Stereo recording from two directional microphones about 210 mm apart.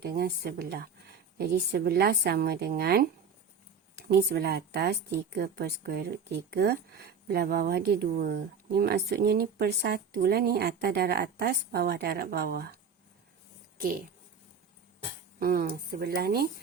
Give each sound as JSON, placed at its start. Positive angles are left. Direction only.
{"t": 0.0, "sound": "a woman's voice", "side_deg": -50}
{"t": 13.7, "sound": "speech", "side_deg": -45}
{"t": 15.4, "sound": "a woman's voice", "side_deg": -45}